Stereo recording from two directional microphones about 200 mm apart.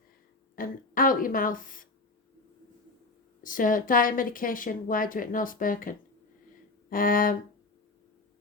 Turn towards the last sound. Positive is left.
turn(degrees=45)  # may be behind; listen again after turning